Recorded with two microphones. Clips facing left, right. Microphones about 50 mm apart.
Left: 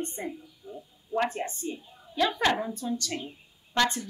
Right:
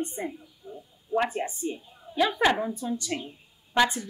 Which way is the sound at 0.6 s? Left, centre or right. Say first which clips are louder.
Even; right.